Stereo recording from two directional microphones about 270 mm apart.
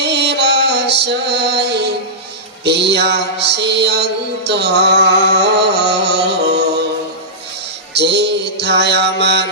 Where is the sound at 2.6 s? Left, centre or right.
Right.